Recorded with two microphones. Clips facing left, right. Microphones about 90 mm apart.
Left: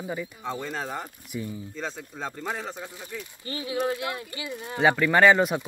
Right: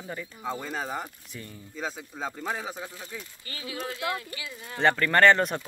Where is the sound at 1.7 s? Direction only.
5° right (ahead or behind).